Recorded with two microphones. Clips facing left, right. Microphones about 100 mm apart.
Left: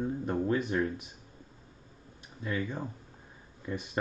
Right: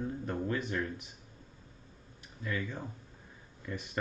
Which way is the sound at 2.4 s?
20° left (ahead or behind).